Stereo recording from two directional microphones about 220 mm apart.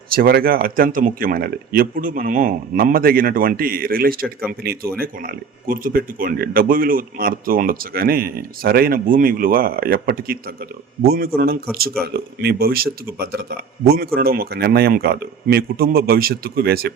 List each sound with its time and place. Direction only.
0.1 s speech: 45° right (ahead or behind)